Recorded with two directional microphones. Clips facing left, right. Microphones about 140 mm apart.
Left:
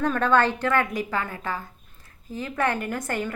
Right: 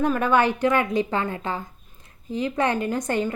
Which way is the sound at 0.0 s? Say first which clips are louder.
Right 1 dB; 10° right (ahead or behind).